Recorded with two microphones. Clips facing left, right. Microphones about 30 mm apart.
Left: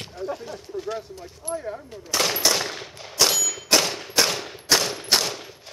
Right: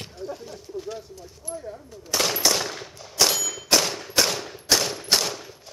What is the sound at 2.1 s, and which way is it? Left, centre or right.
Machine gun, centre.